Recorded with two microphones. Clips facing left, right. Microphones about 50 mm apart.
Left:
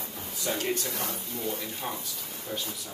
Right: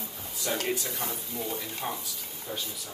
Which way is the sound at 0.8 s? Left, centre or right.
Left.